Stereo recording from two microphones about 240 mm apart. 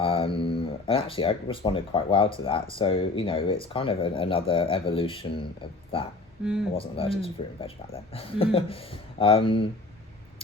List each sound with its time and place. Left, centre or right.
0.0 s speech: left
6.4 s speech: centre
6.7 s speech: left